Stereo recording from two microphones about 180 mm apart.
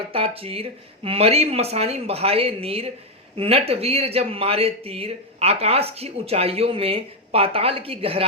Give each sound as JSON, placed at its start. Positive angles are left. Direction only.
{"t": 0.1, "sound": "speech", "side_deg": -30}